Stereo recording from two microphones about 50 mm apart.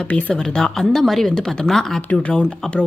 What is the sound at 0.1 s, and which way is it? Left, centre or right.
Speech, left.